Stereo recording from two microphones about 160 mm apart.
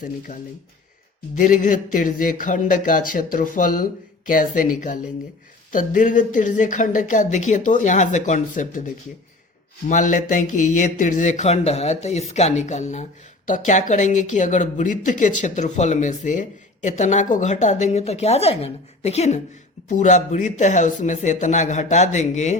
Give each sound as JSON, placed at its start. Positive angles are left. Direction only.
{"t": 0.0, "sound": "speech", "side_deg": 50}
{"t": 1.4, "sound": "speech", "side_deg": 50}
{"t": 9.9, "sound": "speech", "side_deg": 50}